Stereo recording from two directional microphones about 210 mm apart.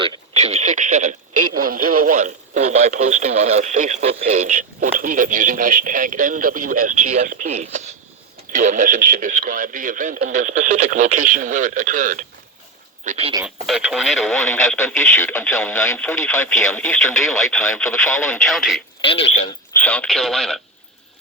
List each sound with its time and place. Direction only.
0.0 s radio: 30° right (ahead or behind)
1.6 s speech: 40° right (ahead or behind)
13.4 s speech: 5° right (ahead or behind)
19.0 s speech: 25° left (ahead or behind)
19.7 s speech: 5° left (ahead or behind)